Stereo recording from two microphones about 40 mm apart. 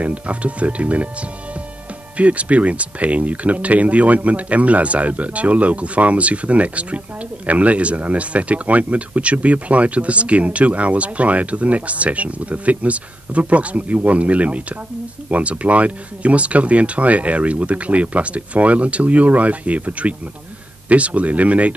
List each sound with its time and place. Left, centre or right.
0.0 s speech: right
2.1 s speech: right